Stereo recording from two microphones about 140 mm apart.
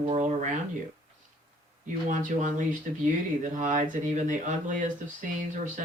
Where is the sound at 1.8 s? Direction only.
65° right (ahead or behind).